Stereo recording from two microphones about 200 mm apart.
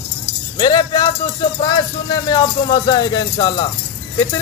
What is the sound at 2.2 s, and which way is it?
Speech, 20° left (ahead or behind).